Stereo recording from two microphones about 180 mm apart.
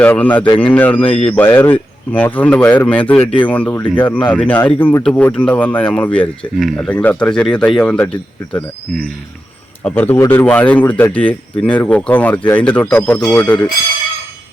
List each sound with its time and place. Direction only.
0.0 s speech: 10° left (ahead or behind)
1.0 s a man's voice: 30° left (ahead or behind)
1.3 s speech: 10° left (ahead or behind)